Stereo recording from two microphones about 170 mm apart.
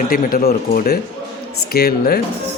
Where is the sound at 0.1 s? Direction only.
55° left (ahead or behind).